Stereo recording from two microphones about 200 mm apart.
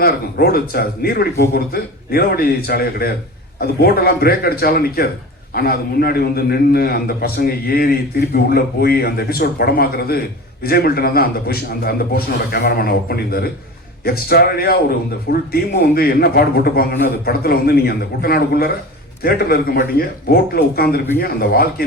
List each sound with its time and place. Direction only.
0.0 s a man's voice: 50° left (ahead or behind)